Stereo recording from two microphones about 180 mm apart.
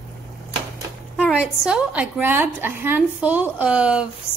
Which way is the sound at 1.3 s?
5° right (ahead or behind).